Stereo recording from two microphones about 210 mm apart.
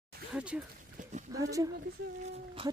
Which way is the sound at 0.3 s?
5° right (ahead or behind).